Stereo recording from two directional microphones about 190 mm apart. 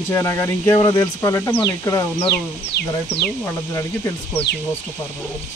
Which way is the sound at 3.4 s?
15° left (ahead or behind).